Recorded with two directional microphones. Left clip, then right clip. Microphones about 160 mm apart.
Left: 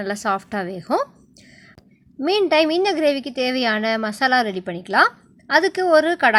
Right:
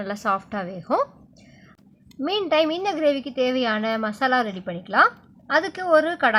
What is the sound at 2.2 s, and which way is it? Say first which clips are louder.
A woman's voice: left 4 dB; 20° left (ahead or behind).